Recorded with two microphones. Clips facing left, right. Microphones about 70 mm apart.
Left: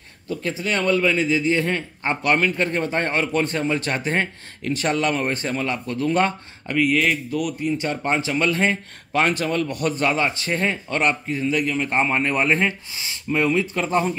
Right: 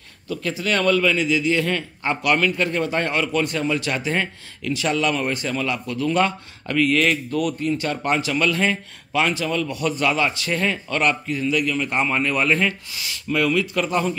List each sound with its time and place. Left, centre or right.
0.3 s a man's voice: left
6.6 s speech: centre
7.6 s a man's voice: left
9.1 s a man's voice: left